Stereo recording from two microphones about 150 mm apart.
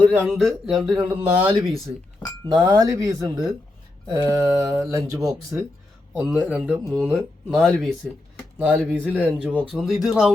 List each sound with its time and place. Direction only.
0.0 s speech: 5° left (ahead or behind)
0.9 s speech: 30° right (ahead or behind)
2.5 s mantra: 25° right (ahead or behind)
5.1 s speech: centre (ahead or behind)
7.1 s speech: 5° left (ahead or behind)
9.4 s speech: 10° right (ahead or behind)